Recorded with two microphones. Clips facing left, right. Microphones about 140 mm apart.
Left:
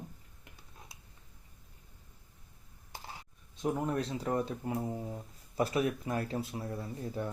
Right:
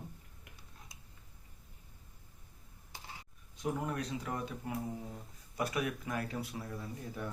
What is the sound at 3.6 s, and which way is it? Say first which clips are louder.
Speech: left 4 dB; 30° left (ahead or behind).